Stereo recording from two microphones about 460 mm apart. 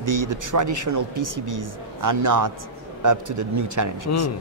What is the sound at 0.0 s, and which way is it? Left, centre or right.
Speech, right.